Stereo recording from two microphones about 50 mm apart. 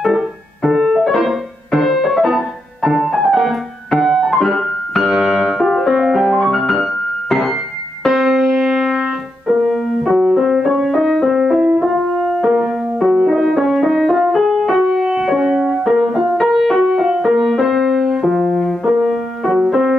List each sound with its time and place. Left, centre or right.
0.0 s music: centre
5.1 s piano: centre
5.6 s music: centre
12.4 s music: centre